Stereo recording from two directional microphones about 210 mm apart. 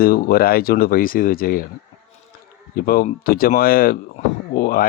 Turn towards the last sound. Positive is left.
turn(degrees=45)  # may be behind; listen again after turning